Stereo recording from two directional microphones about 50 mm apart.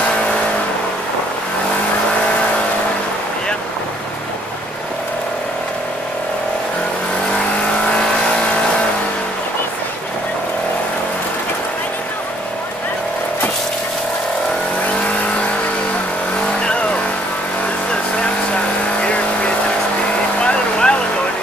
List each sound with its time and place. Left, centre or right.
20.3 s vehicle: left